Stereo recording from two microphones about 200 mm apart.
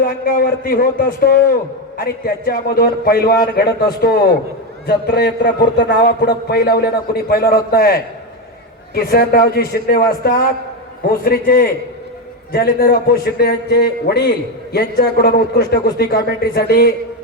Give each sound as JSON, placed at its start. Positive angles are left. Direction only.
{"t": 0.0, "sound": "a man's voice", "side_deg": 50}